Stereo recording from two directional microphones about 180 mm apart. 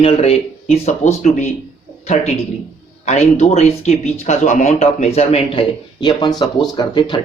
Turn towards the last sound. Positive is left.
turn(degrees=25)  # may be behind; listen again after turning